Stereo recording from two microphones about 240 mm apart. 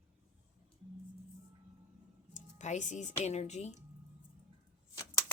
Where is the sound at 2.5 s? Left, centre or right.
Left.